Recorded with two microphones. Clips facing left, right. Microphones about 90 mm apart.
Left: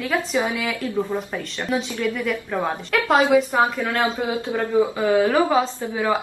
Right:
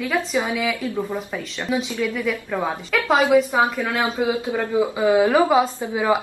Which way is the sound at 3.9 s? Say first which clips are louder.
Right 1 dB; 15° right (ahead or behind).